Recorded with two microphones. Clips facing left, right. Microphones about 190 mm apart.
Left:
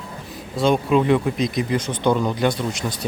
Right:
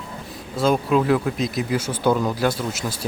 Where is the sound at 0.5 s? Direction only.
Centre (ahead or behind).